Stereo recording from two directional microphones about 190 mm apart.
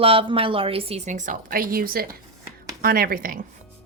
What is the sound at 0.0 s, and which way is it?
A woman's voice, 30° right (ahead or behind).